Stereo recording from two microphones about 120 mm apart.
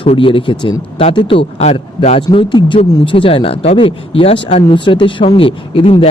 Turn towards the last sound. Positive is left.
turn(degrees=45)  # may be behind; listen again after turning